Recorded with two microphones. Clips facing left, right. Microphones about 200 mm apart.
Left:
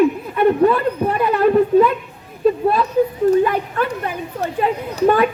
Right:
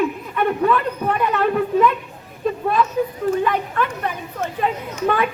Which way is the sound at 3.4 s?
40° left (ahead or behind).